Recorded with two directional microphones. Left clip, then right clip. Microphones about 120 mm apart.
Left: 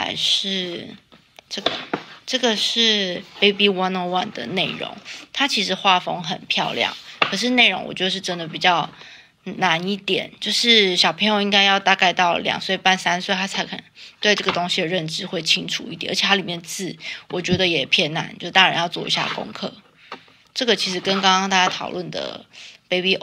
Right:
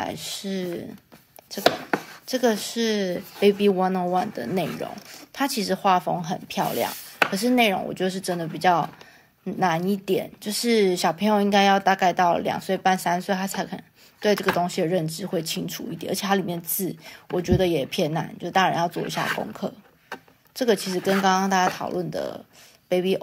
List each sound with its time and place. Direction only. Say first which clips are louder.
0.0 s a woman's voice: left 11 dB; 30° right (ahead or behind)
6.7 s chopping: left 4 dB; 20° right (ahead or behind)
7.2 s a woman's voice: left 5 dB; 40° right (ahead or behind)
19.1 s speech: left 3 dB; 5° right (ahead or behind)
20.5 s a woman's voice: left 3 dB; 35° right (ahead or behind)